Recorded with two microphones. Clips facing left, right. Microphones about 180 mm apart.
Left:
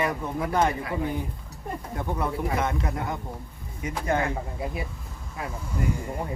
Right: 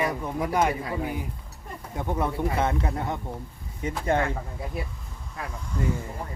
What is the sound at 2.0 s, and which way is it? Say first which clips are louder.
Speech: right 2 dB; 20° right (ahead or behind).